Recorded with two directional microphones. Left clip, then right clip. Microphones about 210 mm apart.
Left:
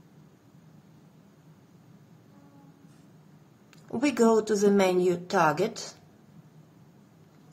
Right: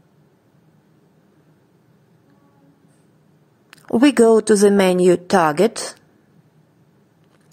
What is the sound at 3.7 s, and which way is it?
A woman's voice, 45° right (ahead or behind).